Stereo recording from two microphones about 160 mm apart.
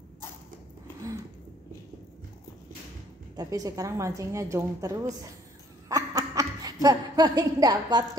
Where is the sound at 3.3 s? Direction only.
20° right (ahead or behind).